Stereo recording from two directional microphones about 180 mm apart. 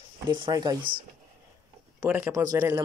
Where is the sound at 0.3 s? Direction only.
25° right (ahead or behind).